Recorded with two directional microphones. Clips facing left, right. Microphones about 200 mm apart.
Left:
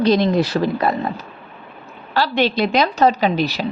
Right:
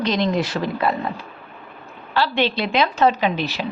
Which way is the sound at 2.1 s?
40° left (ahead or behind).